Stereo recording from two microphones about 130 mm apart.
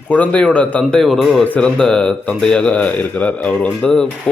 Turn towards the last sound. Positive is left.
turn(degrees=5)  # may be behind; listen again after turning